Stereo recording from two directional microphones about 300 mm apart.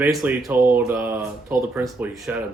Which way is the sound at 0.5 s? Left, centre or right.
Right.